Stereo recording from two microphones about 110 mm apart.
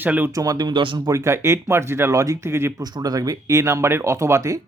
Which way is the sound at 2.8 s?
35° right (ahead or behind).